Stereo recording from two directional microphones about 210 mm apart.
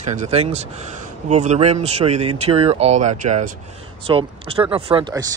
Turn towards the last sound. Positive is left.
turn(degrees=-20)  # may be behind; listen again after turning